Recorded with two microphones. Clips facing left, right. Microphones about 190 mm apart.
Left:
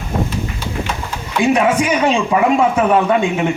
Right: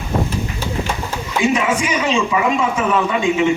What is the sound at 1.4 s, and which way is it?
Speech, 60° left (ahead or behind).